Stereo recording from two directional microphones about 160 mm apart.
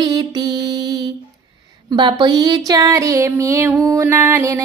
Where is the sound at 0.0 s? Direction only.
25° right (ahead or behind).